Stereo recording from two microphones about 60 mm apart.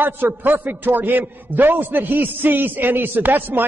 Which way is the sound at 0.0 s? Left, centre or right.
Right.